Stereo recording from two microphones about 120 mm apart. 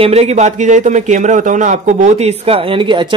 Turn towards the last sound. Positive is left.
turn(degrees=-45)  # may be behind; listen again after turning